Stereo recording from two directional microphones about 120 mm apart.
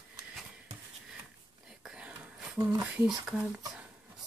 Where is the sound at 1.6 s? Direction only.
5° right (ahead or behind).